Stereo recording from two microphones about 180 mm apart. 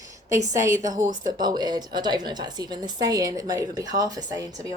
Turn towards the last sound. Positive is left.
turn(degrees=-20)  # may be behind; listen again after turning